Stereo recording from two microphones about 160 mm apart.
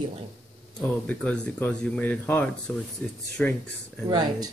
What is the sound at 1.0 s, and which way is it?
Speech, 10° left (ahead or behind).